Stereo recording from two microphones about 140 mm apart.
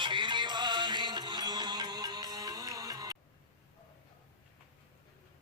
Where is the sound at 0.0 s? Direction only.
35° right (ahead or behind).